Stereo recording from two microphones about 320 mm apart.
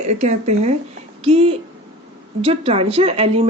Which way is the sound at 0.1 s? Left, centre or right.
Right.